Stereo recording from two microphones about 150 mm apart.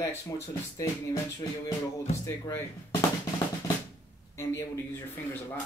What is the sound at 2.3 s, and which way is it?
Speech, 20° left (ahead or behind).